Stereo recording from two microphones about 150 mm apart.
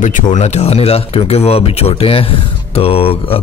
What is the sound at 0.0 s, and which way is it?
Speech, 50° left (ahead or behind).